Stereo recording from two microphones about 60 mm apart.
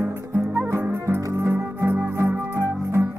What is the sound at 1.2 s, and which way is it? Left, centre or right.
Music, right.